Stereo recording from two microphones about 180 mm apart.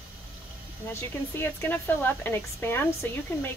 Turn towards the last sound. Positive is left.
turn(degrees=10)  # may be behind; listen again after turning